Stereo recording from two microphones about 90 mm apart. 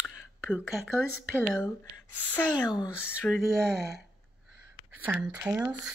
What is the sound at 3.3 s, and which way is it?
Speech, 10° left (ahead or behind).